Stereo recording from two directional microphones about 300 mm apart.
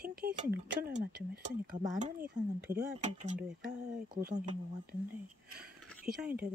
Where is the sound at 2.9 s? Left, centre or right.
Right.